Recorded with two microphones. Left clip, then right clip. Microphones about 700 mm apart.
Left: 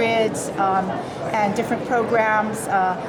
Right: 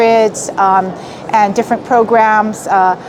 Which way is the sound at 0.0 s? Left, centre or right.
Right.